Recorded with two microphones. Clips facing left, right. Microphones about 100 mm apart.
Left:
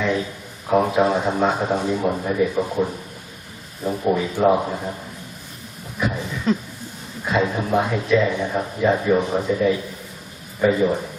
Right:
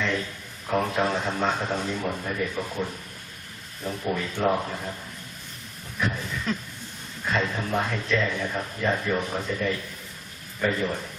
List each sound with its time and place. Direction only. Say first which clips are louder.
0.0 s a sound: left 6 dB; 10° left (ahead or behind)
0.7 s speech: left 7 dB; 15° left (ahead or behind)
4.1 s speech: left 7 dB; 10° left (ahead or behind)
4.6 s a man's voice: left 6 dB; 20° left (ahead or behind)
6.5 s a man's voice: left 9 dB; 25° left (ahead or behind)
7.3 s speech: left 6 dB; 15° left (ahead or behind)